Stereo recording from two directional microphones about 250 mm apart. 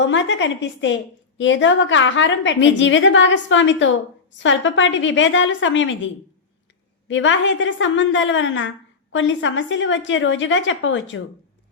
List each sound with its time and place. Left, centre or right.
0.0 s a woman's voice: left
7.1 s a woman's voice: left